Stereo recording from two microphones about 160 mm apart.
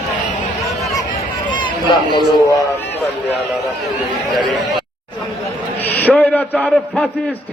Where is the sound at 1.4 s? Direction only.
30° left (ahead or behind).